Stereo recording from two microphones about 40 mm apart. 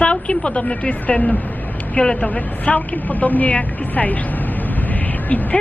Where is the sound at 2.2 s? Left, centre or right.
Left.